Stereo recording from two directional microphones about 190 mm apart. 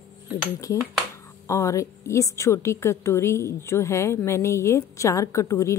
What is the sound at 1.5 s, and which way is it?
A woman's voice, 15° left (ahead or behind).